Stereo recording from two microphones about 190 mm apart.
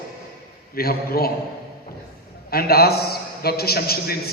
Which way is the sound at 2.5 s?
55° left (ahead or behind).